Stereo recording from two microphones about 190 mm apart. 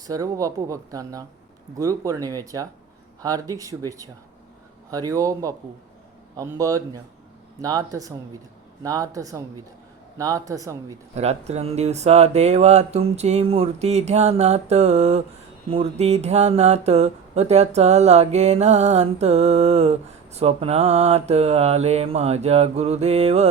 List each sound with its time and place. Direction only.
0.1 s speech: 15° right (ahead or behind)
11.1 s speech: 35° right (ahead or behind)